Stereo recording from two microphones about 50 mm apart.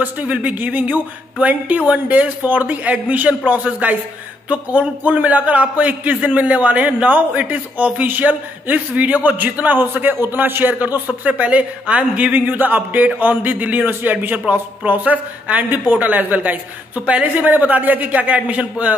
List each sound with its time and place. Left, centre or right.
0.0 s a man's voice: right